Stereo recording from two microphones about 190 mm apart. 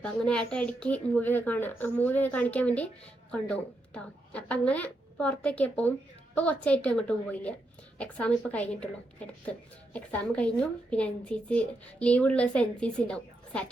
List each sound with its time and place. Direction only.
0.0 s speech: 5° left (ahead or behind)